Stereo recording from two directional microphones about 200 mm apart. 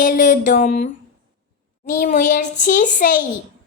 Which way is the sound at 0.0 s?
40° left (ahead or behind).